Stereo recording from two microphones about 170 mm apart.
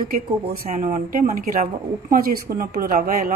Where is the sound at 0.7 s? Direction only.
45° right (ahead or behind).